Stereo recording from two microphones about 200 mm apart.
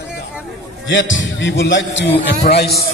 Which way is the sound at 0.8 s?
65° left (ahead or behind).